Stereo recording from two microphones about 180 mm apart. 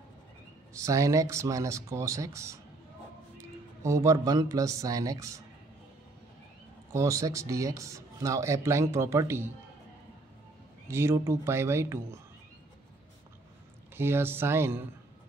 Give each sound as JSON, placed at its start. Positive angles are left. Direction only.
{"t": 0.7, "sound": "a man's voice", "side_deg": -15}
{"t": 6.9, "sound": "speech", "side_deg": -15}
{"t": 10.9, "sound": "speech", "side_deg": -15}
{"t": 13.9, "sound": "speech", "side_deg": -15}